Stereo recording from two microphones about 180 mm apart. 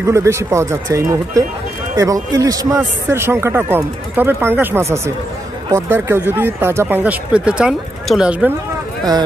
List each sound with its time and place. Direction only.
0.0 s speech: 15° right (ahead or behind)